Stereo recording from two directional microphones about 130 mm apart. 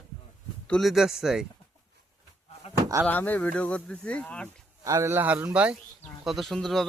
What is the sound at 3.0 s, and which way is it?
Speech, 15° left (ahead or behind).